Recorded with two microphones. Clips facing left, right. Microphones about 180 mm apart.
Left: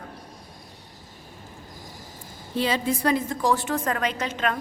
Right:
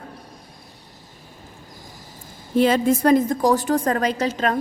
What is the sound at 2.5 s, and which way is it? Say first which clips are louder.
A woman's voice: right 8 dB; 50° right (ahead or behind).